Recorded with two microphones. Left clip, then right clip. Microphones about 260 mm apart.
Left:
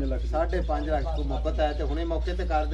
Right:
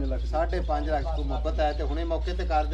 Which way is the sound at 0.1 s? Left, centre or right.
Right.